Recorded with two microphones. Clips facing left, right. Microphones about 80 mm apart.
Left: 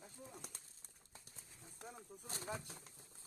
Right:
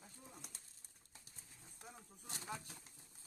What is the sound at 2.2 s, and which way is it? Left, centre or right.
Speech, left.